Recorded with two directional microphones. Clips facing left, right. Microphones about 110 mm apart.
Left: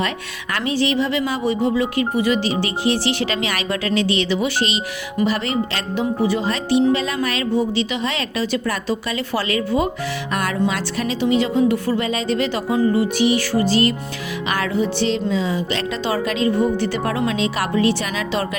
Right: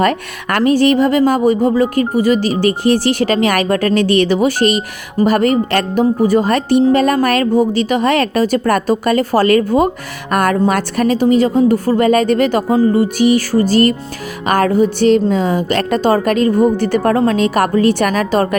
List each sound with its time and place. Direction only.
0.0 s speech: 50° right (ahead or behind)